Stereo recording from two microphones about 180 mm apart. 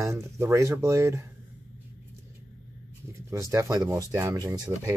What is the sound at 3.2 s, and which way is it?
Speech, 15° right (ahead or behind).